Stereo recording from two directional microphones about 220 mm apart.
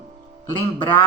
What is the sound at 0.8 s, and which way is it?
Speech, 20° left (ahead or behind).